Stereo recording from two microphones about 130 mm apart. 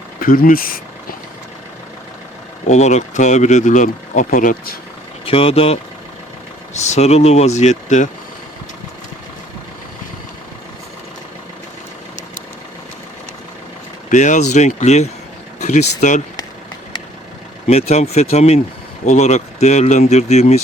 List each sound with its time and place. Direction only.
0.2 s speech: 90° left
2.6 s speech: 60° left (ahead or behind); by 4.5 s 85° left
5.2 s speech: 45° left (ahead or behind)
6.7 s speech: 60° left (ahead or behind)
14.1 s speech: 70° left (ahead or behind)
17.7 s speech: 55° left (ahead or behind)